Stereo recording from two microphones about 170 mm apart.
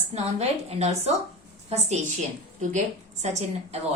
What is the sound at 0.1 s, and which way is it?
A woman's voice, 40° right (ahead or behind).